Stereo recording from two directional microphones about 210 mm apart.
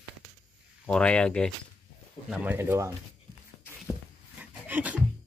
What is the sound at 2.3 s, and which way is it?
Speech, 10° right (ahead or behind).